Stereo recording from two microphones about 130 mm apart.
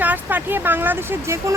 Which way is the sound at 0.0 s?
15° right (ahead or behind).